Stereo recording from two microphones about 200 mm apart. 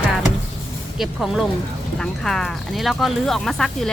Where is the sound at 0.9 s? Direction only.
Centre (ahead or behind).